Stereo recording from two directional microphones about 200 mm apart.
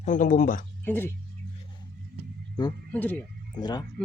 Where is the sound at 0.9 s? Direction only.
10° left (ahead or behind).